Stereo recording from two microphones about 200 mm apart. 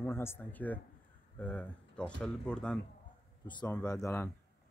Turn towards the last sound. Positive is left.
turn(degrees=10)  # may be behind; listen again after turning